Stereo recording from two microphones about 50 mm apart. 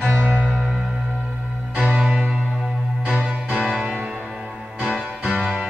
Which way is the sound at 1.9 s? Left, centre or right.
Centre.